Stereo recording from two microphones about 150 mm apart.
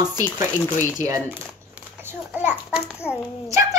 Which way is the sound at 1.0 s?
20° right (ahead or behind).